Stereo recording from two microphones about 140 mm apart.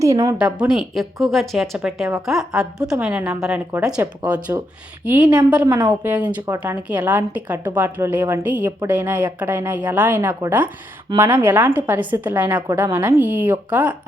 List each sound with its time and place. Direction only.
0.0 s a woman's voice: 25° right (ahead or behind)
0.3 s a woman's voice: 10° right (ahead or behind)
5.6 s a woman's voice: 25° right (ahead or behind)
5.9 s a woman's voice: 10° right (ahead or behind)